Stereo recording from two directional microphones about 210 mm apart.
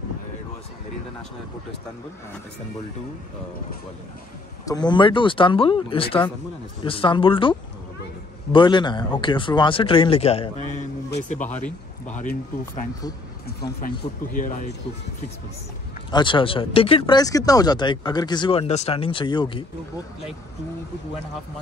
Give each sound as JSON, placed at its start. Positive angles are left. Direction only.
{"t": 4.6, "sound": "speech", "side_deg": 20}
{"t": 12.2, "sound": "speech", "side_deg": 40}
{"t": 14.3, "sound": "speech", "side_deg": 40}
{"t": 16.1, "sound": "speech", "side_deg": 20}